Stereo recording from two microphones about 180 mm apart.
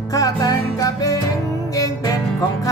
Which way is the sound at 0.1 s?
20° left (ahead or behind).